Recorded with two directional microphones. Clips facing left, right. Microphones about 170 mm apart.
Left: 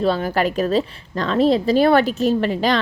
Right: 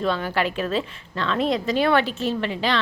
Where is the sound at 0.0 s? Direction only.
40° left (ahead or behind).